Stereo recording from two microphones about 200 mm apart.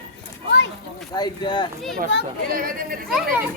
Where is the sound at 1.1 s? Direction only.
20° left (ahead or behind).